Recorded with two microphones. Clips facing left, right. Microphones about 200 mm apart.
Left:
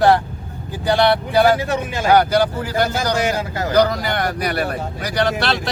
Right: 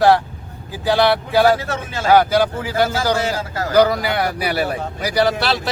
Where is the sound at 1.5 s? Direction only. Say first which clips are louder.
Left 4 dB; 15° left (ahead or behind).